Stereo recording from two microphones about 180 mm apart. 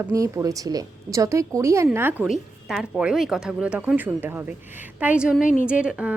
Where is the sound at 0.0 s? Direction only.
15° right (ahead or behind).